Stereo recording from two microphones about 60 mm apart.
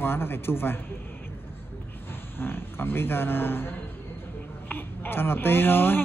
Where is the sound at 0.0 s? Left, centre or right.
Left.